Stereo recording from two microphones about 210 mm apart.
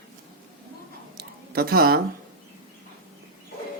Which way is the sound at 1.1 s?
45° right (ahead or behind).